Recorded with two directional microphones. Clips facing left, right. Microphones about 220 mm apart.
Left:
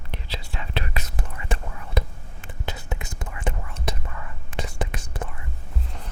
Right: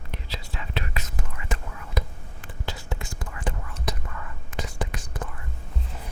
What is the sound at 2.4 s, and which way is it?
Whispering, 20° left (ahead or behind).